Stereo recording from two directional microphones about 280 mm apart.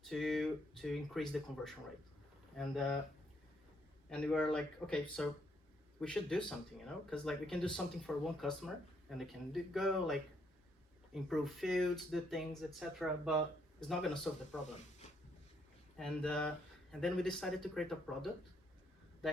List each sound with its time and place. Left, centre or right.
0.0 s speech: centre
4.1 s speech: centre
15.0 s a sound: left
16.0 s speech: centre